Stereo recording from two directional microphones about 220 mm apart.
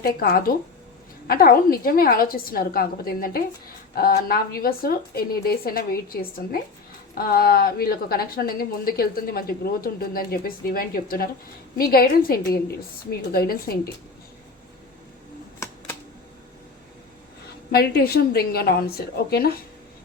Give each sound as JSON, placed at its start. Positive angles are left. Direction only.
{"t": 0.0, "sound": "a woman's voice", "side_deg": 45}
{"t": 15.6, "sound": "a sound", "side_deg": 10}
{"t": 17.7, "sound": "a woman's voice", "side_deg": 45}